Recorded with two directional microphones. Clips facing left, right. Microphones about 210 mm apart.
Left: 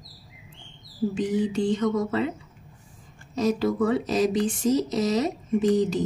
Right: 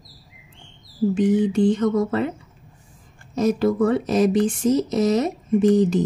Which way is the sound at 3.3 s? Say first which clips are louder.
Right 4 dB; 50° right (ahead or behind).